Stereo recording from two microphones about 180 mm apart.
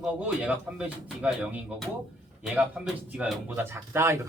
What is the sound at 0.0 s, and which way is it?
Speech, 10° right (ahead or behind).